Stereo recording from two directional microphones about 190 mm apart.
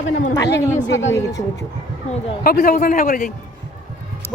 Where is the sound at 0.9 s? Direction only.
80° left.